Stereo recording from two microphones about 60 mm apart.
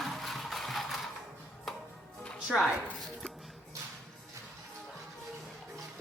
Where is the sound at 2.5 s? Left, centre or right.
Centre.